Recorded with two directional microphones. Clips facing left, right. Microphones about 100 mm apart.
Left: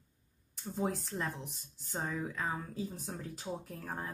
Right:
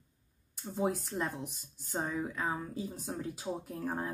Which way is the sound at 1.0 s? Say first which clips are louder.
Right 3 dB; 5° right (ahead or behind).